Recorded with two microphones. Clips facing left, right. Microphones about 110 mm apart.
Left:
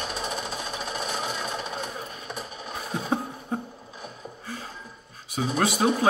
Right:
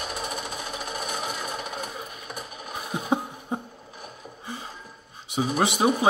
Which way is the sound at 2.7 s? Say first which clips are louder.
Right 2 dB; 15° right (ahead or behind).